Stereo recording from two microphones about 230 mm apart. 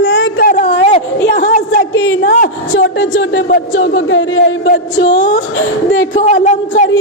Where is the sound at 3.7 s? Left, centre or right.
Left.